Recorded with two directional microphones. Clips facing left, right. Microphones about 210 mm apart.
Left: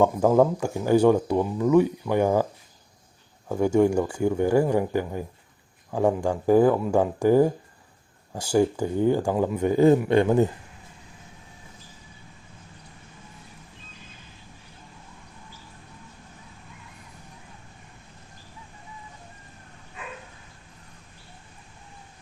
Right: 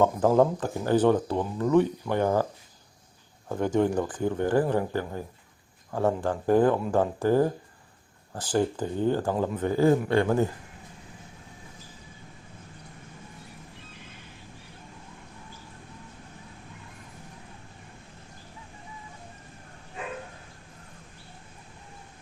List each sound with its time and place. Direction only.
0.3 s speech: 10° left (ahead or behind)
3.5 s speech: 10° left (ahead or behind)